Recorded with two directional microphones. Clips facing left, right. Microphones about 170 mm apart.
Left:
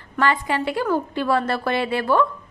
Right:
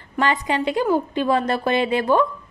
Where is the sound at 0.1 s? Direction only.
20° right (ahead or behind).